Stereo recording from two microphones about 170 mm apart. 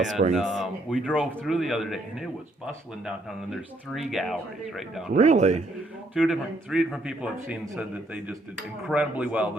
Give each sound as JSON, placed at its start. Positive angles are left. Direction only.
{"t": 0.0, "sound": "a man's voice", "side_deg": -45}
{"t": 0.3, "sound": "a man's voice", "side_deg": 0}
{"t": 3.1, "sound": "a man's voice", "side_deg": 0}
{"t": 5.1, "sound": "a man's voice", "side_deg": -45}
{"t": 6.1, "sound": "a man's voice", "side_deg": -5}